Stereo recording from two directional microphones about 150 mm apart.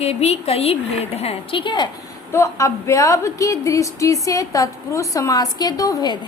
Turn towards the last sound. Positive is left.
turn(degrees=25)  # may be behind; listen again after turning